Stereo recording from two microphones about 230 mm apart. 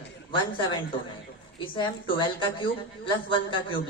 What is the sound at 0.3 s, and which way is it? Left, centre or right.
A woman's voice, left.